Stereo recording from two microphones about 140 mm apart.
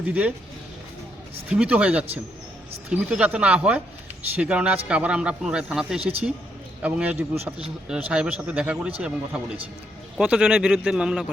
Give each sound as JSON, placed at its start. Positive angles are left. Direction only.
{"t": 0.0, "sound": "speech", "side_deg": -10}
{"t": 1.5, "sound": "speech", "side_deg": -10}
{"t": 6.0, "sound": "a man's voice", "side_deg": -45}
{"t": 6.8, "sound": "speech", "side_deg": -10}